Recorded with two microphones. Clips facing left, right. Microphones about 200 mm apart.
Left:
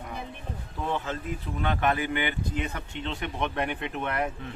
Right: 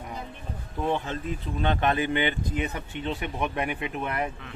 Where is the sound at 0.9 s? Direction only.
20° right (ahead or behind).